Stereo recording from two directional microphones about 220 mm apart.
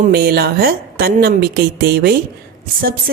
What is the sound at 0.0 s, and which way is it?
A woman's voice, 45° right (ahead or behind).